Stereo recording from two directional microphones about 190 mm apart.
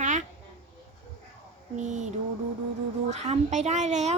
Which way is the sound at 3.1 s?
35° right (ahead or behind).